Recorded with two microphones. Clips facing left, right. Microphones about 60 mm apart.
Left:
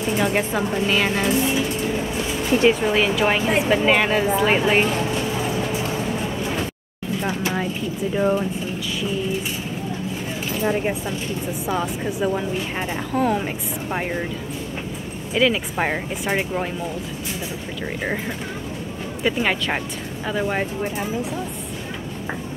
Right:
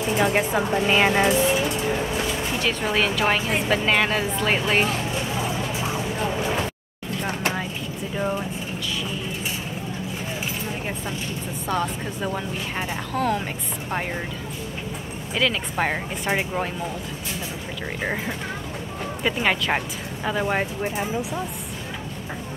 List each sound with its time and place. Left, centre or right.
0.1 s speech: centre
2.7 s a woman's voice: centre
8.1 s a woman's voice: centre
11.6 s a woman's voice: centre
15.3 s a woman's voice: centre
18.0 s a woman's voice: centre